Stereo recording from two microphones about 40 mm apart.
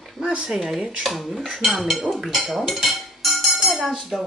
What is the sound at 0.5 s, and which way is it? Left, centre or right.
Speech, centre.